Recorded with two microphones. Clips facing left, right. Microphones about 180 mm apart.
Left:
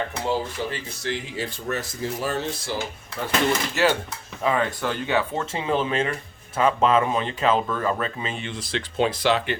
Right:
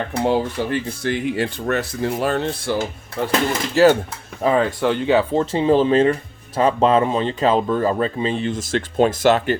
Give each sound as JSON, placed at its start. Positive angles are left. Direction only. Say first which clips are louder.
{"t": 0.3, "sound": "speech", "louder": "right 7 dB", "side_deg": -55}
{"t": 3.8, "sound": "speech", "louder": "right 8 dB", "side_deg": -35}